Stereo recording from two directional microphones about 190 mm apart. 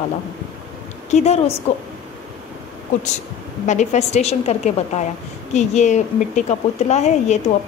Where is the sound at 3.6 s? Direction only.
40° left (ahead or behind).